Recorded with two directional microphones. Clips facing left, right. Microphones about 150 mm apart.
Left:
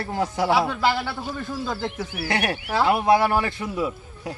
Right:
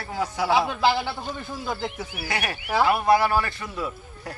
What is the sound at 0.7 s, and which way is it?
Speech, 15° right (ahead or behind).